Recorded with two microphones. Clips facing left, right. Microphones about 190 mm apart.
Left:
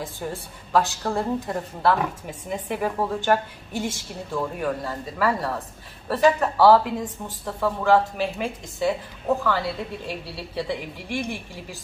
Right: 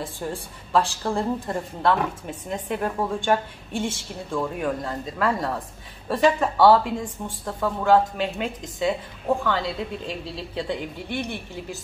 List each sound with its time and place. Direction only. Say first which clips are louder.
0.0 s a woman's voice: right 1 dB; 5° left (ahead or behind)